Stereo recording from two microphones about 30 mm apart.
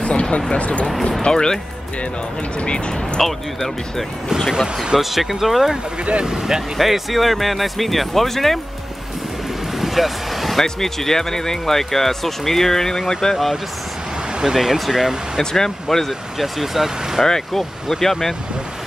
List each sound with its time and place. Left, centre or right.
0.0 s speech: left
1.2 s speech: left
2.6 s speech: left
3.2 s speech: centre
4.5 s speech: centre
6.2 s speech: right
6.8 s speech: centre
9.8 s vehicle: centre
10.6 s speech: centre
14.4 s speech: centre
15.5 s speech: centre
16.1 s speech: centre
17.2 s speech: centre